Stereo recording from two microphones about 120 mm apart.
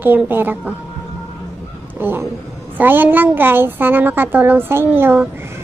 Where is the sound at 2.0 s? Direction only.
20° right (ahead or behind).